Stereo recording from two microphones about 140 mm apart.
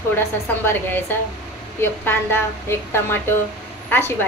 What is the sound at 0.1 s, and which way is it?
A woman's voice, 15° left (ahead or behind).